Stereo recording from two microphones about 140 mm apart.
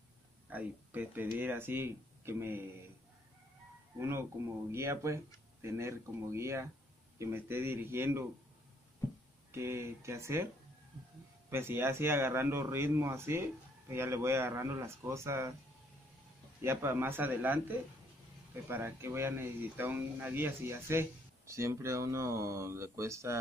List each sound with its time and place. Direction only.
0.5 s speech: 10° right (ahead or behind)
4.0 s speech: 20° right (ahead or behind)
9.5 s speech: 20° right (ahead or behind)
11.5 s speech: 15° right (ahead or behind)
16.6 s speech: 15° right (ahead or behind)